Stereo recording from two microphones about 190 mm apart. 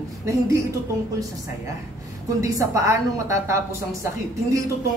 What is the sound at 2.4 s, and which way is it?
Speech, 15° right (ahead or behind).